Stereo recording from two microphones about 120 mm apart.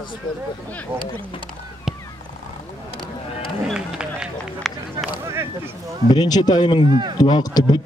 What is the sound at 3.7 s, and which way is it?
Run, 5° right (ahead or behind).